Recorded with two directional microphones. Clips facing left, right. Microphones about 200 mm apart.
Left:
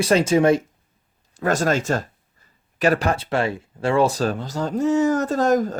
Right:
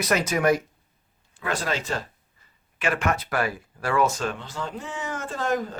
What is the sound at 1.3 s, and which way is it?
Speech, 45° left (ahead or behind).